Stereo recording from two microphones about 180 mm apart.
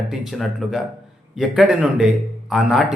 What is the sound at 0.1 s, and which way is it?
A man's voice, centre (ahead or behind).